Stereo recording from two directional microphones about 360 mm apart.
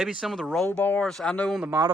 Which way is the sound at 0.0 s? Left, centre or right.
Centre.